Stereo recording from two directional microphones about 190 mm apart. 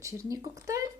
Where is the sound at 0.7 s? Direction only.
15° right (ahead or behind).